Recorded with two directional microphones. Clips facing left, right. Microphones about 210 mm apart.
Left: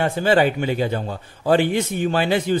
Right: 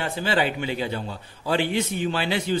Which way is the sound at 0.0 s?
50° left (ahead or behind).